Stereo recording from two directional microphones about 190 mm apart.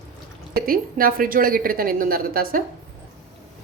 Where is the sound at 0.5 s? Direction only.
50° right (ahead or behind).